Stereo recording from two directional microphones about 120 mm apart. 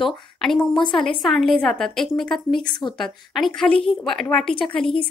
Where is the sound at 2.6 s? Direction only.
40° left (ahead or behind).